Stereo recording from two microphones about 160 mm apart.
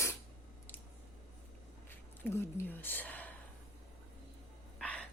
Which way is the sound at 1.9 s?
15° left (ahead or behind).